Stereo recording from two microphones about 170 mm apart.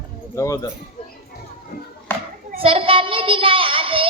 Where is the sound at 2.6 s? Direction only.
35° right (ahead or behind).